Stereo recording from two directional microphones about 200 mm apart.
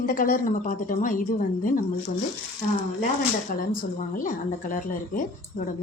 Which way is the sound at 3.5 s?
45° left (ahead or behind).